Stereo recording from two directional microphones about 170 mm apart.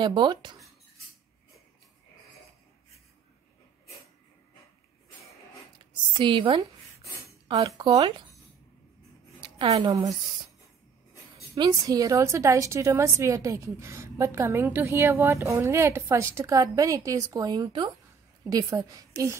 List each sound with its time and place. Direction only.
0.0 s a woman's voice: 25° right (ahead or behind)
6.1 s a woman's voice: 30° right (ahead or behind)
9.4 s a woman's voice: 30° right (ahead or behind)
11.5 s a woman's voice: 20° right (ahead or behind)